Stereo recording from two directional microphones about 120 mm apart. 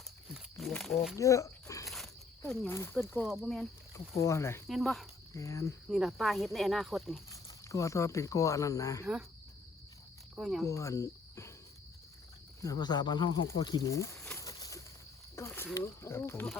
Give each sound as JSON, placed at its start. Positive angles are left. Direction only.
{"t": 0.3, "sound": "a sound", "side_deg": 0}
{"t": 1.2, "sound": "a sound", "side_deg": 25}
{"t": 2.6, "sound": "speech", "side_deg": 20}
{"t": 3.2, "sound": "speech", "side_deg": 0}
{"t": 4.2, "sound": "speech", "side_deg": 25}
{"t": 4.7, "sound": "speech", "side_deg": 0}
{"t": 5.3, "sound": "speech", "side_deg": 25}
{"t": 5.9, "sound": "speech", "side_deg": 0}
{"t": 7.3, "sound": "speech", "side_deg": 25}
{"t": 10.3, "sound": "speech", "side_deg": -5}
{"t": 10.7, "sound": "speech", "side_deg": 25}
{"t": 12.6, "sound": "speech", "side_deg": 35}
{"t": 13.5, "sound": "a sound", "side_deg": 35}
{"t": 15.4, "sound": "speech", "side_deg": 20}